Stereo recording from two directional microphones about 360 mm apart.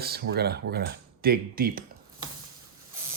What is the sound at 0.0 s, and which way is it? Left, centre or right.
Speech, right.